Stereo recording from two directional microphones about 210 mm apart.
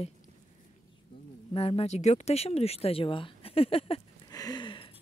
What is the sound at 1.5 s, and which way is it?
Speech, 25° left (ahead or behind).